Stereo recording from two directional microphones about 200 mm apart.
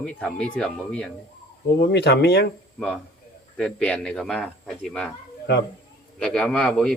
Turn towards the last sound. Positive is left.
turn(degrees=0)  # may be behind; listen again after turning